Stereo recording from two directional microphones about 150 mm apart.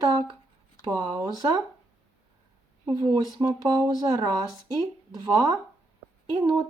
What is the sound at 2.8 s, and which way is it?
Speech, 25° right (ahead or behind).